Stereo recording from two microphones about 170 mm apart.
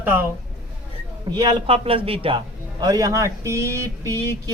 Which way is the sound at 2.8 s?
20° right (ahead or behind).